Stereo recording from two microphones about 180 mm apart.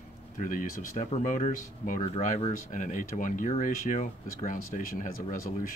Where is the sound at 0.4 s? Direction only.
50° left (ahead or behind).